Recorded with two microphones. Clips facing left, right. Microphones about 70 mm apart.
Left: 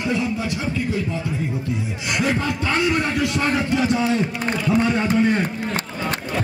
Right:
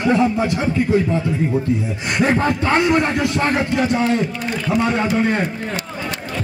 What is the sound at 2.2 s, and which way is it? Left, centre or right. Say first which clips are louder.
A man's voice: right 5 dB; right.